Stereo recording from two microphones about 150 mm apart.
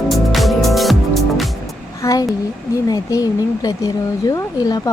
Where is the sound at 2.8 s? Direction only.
25° left (ahead or behind).